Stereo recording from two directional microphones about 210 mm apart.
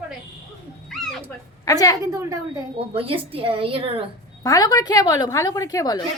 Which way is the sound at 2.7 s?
25° right (ahead or behind).